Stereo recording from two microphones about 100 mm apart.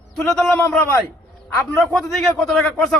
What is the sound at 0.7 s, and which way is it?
Speech, 20° left (ahead or behind).